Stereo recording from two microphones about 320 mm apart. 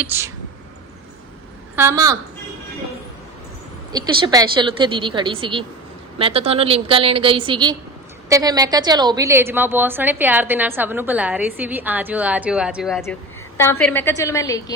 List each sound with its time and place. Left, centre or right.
0.0 s a woman's voice: centre
1.7 s a woman's voice: centre
3.9 s a woman's voice: centre